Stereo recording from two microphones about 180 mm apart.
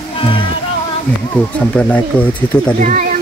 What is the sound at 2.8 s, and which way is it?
Speech, 45° right (ahead or behind).